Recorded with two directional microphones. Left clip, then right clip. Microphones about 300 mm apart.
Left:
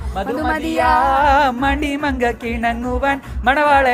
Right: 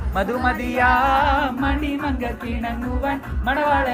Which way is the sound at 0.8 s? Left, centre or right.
Centre.